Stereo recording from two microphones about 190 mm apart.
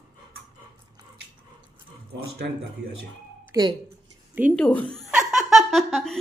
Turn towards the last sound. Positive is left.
turn(degrees=0)  # may be behind; listen again after turning